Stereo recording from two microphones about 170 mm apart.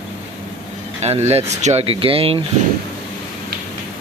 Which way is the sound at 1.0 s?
40° right (ahead or behind).